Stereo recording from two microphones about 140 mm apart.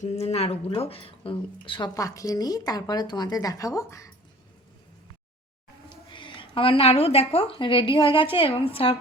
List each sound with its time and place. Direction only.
0.0 s speech: 50° left (ahead or behind)
2.0 s speech: 25° left (ahead or behind)
5.9 s a woman's voice: 35° left (ahead or behind)